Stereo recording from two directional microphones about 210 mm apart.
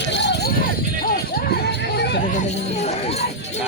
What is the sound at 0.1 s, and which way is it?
Jingle bell, 55° left (ahead or behind).